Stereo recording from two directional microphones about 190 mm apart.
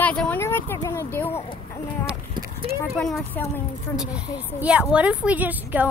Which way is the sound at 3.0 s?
5° left (ahead or behind).